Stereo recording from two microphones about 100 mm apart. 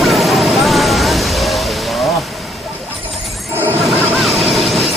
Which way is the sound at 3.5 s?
20° right (ahead or behind).